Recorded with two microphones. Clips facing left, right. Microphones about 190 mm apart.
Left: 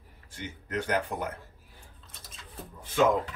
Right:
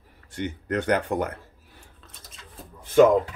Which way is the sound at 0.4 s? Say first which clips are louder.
Right 7 dB; 70° right (ahead or behind).